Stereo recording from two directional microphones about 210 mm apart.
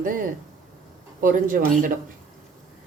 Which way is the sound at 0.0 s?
40° right (ahead or behind).